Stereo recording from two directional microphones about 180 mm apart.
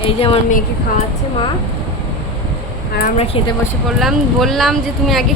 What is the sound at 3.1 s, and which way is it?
Speech, 35° left (ahead or behind).